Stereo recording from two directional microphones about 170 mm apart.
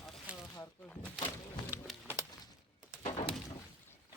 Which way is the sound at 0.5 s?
20° left (ahead or behind).